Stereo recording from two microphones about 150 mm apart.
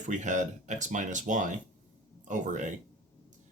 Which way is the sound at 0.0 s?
55° right (ahead or behind).